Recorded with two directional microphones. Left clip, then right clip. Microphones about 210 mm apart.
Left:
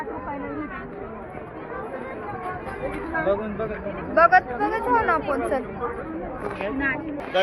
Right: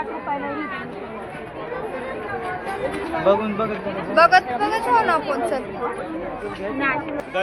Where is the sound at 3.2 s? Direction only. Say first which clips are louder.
Right 8 dB; 45° right (ahead or behind).